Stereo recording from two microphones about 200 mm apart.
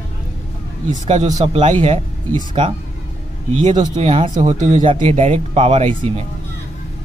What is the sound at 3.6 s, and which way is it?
Speech, 35° right (ahead or behind).